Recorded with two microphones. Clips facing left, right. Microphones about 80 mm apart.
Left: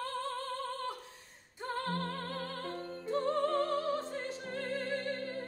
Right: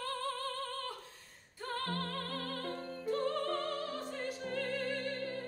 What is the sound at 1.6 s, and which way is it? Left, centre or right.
Music, left.